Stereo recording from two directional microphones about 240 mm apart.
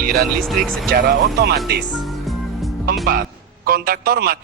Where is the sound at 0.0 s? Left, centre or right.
Right.